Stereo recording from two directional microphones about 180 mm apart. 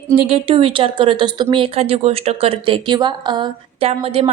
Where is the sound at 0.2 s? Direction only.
30° right (ahead or behind).